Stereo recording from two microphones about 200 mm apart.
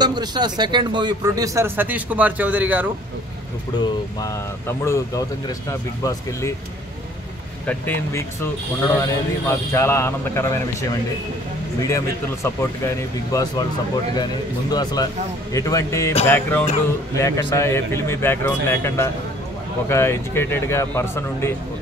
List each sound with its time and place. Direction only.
0.0 s speech: 20° right (ahead or behind)
3.8 s speech: 15° left (ahead or behind)
7.6 s speech: 10° left (ahead or behind)
12.4 s speech: 15° left (ahead or behind)